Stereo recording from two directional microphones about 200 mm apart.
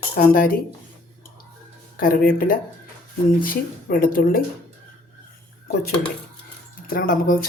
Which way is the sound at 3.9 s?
45° left (ahead or behind).